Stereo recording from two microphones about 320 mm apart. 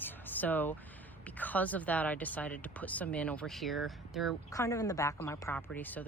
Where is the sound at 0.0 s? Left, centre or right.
Centre.